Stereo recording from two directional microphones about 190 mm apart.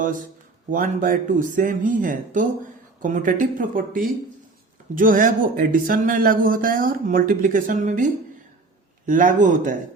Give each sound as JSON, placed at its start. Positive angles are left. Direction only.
{"t": 0.0, "sound": "speech", "side_deg": -45}